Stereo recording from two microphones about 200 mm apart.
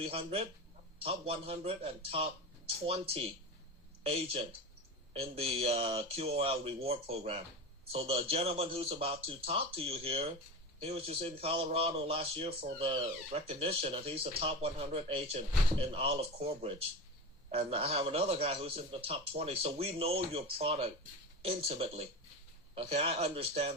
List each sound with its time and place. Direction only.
0.0 s speech: 30° right (ahead or behind)